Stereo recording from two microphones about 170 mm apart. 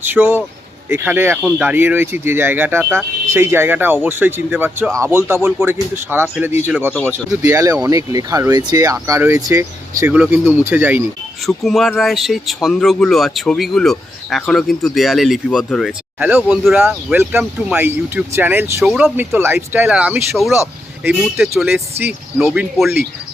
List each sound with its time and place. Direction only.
0.0 s speech: 10° right (ahead or behind)
6.2 s speech: 5° right (ahead or behind)
11.4 s speech: centre (ahead or behind)
16.7 s speech: 15° right (ahead or behind)